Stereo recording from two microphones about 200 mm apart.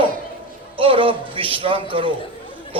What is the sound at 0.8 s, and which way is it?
A man's voice, 25° right (ahead or behind).